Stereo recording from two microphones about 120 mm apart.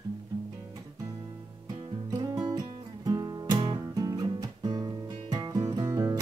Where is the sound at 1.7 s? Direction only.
40° right (ahead or behind).